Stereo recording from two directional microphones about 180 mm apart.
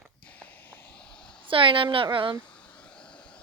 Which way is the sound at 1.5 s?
30° right (ahead or behind).